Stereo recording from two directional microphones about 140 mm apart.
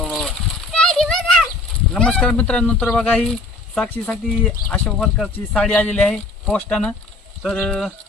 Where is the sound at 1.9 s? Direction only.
5° left (ahead or behind).